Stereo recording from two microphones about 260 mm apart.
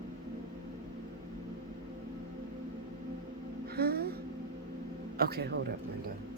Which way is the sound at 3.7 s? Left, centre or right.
Right.